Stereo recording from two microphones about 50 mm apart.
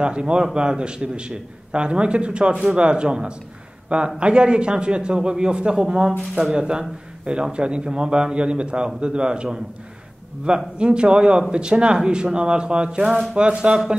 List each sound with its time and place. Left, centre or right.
0.0 s speech: centre